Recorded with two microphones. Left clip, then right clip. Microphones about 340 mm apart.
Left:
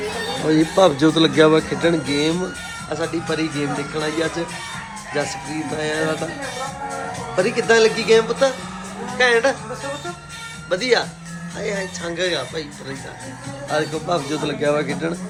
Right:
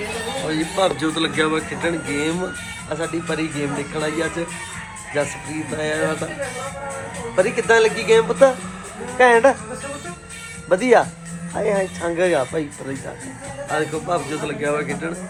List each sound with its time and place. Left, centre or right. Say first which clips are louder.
0.5 s speech: left 6 dB; centre
5.7 s speech: even; centre
7.3 s speech: even; centre
10.7 s speech: right 4 dB; centre
13.7 s speech: left 1 dB; centre